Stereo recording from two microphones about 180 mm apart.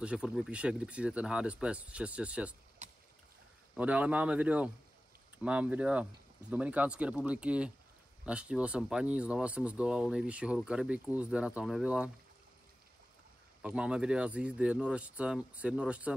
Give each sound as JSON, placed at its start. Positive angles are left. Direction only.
{"t": 0.0, "sound": "speech", "side_deg": -5}
{"t": 2.8, "sound": "boat", "side_deg": -40}
{"t": 3.7, "sound": "speech", "side_deg": -10}
{"t": 13.6, "sound": "speech", "side_deg": -5}